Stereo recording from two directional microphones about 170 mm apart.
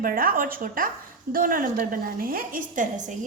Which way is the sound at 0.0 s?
55° right (ahead or behind).